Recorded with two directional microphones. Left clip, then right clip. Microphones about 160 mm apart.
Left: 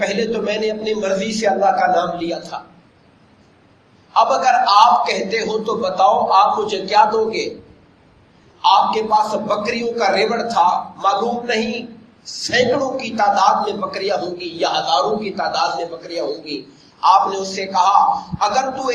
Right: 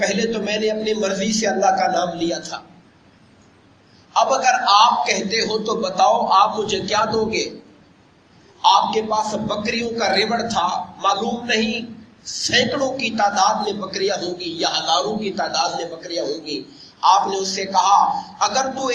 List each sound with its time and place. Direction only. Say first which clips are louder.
0.0 s a man's voice: left 2 dB; 30° right (ahead or behind)
4.1 s a man's voice: left 3 dB; 30° right (ahead or behind)
8.6 s a man's voice: left 2 dB; 30° right (ahead or behind)